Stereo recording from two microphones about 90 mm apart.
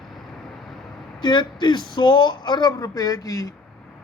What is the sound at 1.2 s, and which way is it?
A man's voice, 55° left (ahead or behind).